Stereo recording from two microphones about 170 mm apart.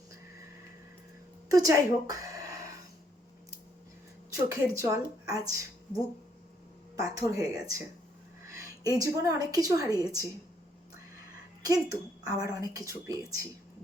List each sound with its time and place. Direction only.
1.5 s a woman's voice: 20° right (ahead or behind)
4.8 s speech: 20° right (ahead or behind)
7.0 s a woman's voice: 20° right (ahead or behind)
8.5 s a sound: 20° right (ahead or behind)
9.0 s a woman's voice: 20° right (ahead or behind)
11.6 s a woman's voice: 20° right (ahead or behind)